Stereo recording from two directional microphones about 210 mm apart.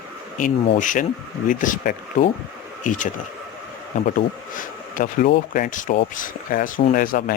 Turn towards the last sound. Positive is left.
turn(degrees=40)  # may be behind; listen again after turning